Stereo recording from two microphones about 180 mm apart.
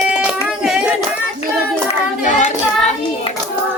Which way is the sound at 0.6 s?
Centre (ahead or behind).